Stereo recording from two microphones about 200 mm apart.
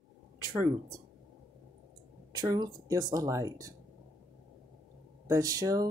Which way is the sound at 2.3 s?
20° right (ahead or behind).